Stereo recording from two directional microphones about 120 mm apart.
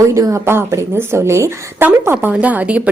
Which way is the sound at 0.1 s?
25° right (ahead or behind).